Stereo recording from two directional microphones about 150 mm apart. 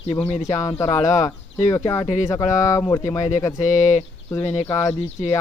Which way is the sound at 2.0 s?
50° left (ahead or behind).